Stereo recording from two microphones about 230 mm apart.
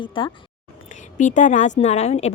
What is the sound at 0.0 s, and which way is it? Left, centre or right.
Speech, left.